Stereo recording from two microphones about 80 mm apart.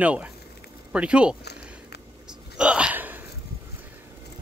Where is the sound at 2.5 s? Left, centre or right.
Centre.